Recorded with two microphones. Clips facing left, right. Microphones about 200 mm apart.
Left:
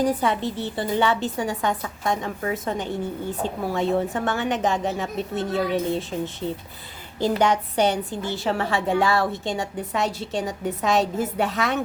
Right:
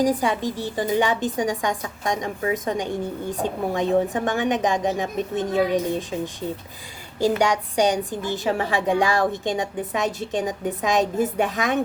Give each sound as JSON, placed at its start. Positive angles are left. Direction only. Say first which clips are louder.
{"t": 0.2, "sound": "a woman's voice", "louder": "even", "side_deg": -15}